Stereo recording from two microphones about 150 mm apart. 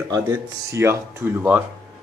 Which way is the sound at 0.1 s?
20° right (ahead or behind).